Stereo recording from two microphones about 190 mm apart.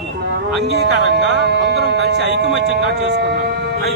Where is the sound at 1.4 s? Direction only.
60° right (ahead or behind).